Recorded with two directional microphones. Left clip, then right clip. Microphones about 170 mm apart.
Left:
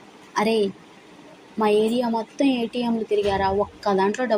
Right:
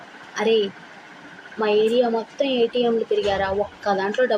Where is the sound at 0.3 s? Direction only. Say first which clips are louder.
Right 2 dB; 45° left (ahead or behind).